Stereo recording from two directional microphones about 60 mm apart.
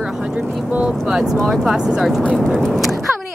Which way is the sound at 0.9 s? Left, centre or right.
Centre.